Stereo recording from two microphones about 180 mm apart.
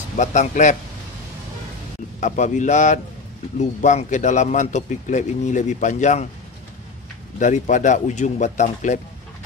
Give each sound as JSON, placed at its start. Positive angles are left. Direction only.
{"t": 0.2, "sound": "a man's voice", "side_deg": 40}
{"t": 2.1, "sound": "a man's voice", "side_deg": 40}
{"t": 7.3, "sound": "speech", "side_deg": 45}